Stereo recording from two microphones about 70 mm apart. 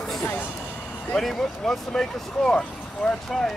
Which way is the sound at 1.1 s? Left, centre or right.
Centre.